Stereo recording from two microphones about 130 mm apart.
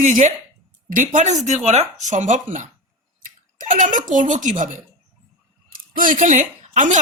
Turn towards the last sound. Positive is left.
turn(degrees=-70)  # may be behind; listen again after turning